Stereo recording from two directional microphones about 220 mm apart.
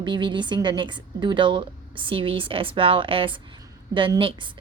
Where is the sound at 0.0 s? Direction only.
20° right (ahead or behind).